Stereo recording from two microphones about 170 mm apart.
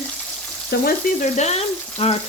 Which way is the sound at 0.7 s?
70° left (ahead or behind).